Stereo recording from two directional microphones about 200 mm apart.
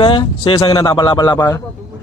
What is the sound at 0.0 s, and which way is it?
Speech, 25° left (ahead or behind).